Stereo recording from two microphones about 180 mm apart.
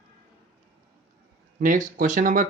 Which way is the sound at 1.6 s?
50° right (ahead or behind).